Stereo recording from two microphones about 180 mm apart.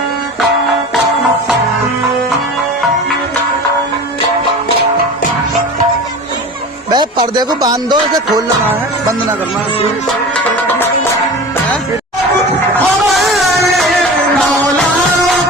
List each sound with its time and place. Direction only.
6.9 s speech: 25° right (ahead or behind)
8.6 s music: 10° right (ahead or behind)
13.0 s music: centre (ahead or behind)